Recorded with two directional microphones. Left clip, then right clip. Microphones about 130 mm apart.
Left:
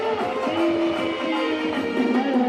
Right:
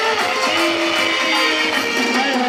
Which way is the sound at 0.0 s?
15° right (ahead or behind).